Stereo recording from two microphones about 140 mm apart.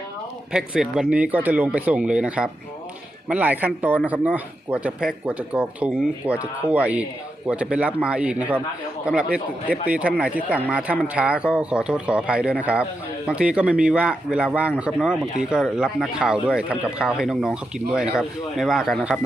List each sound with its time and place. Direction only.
0.5 s speech: 5° right (ahead or behind)